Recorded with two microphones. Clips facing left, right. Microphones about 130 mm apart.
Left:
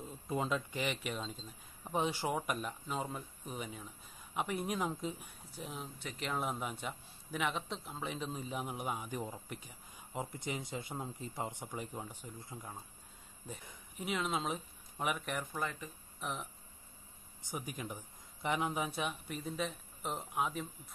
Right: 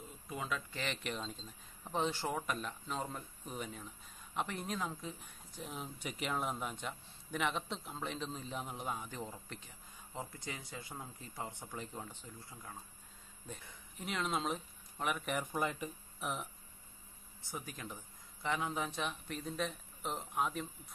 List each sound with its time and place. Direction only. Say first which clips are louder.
0.3 s a man's voice: left 5 dB; 30° left (ahead or behind)
0.7 s a man's voice: left 3 dB; 10° left (ahead or behind)
5.5 s speech: even; centre (ahead or behind)
5.9 s a man's voice: even; 10° right (ahead or behind)
15.5 s speech: right 3 dB; 20° right (ahead or behind)
16.2 s speech: right 1 dB; 5° right (ahead or behind)
17.4 s a man's voice: left 3 dB; 15° left (ahead or behind)